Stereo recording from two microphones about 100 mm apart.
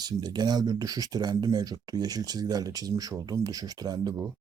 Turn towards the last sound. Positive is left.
turn(degrees=-40)  # may be behind; listen again after turning